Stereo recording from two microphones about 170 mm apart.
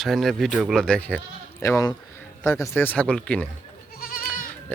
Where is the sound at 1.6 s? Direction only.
20° left (ahead or behind).